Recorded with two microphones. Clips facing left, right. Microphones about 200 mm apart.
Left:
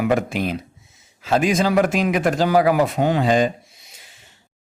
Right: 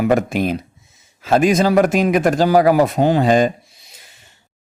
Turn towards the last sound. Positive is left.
turn(degrees=-45)  # may be behind; listen again after turning